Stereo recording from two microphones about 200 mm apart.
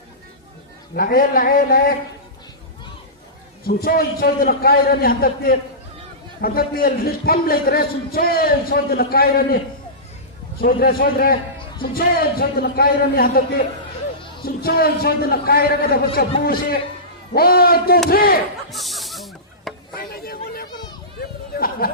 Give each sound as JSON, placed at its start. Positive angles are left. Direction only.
{"t": 0.9, "sound": "a man's voice", "side_deg": 45}
{"t": 3.6, "sound": "a man's voice", "side_deg": 50}
{"t": 10.6, "sound": "a man's voice", "side_deg": 50}
{"t": 18.7, "sound": "snake", "side_deg": 0}
{"t": 20.0, "sound": "a sound", "side_deg": 50}